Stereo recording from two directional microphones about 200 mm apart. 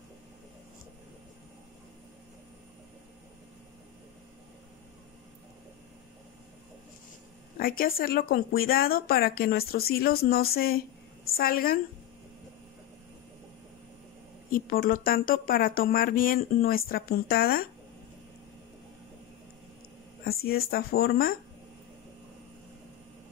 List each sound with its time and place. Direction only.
7.5 s speech: 45° left (ahead or behind)
14.5 s speech: 45° left (ahead or behind)
20.2 s speech: 50° left (ahead or behind)